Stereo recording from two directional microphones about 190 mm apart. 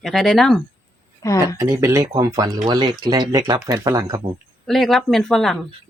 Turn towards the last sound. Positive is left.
turn(degrees=0)  # may be behind; listen again after turning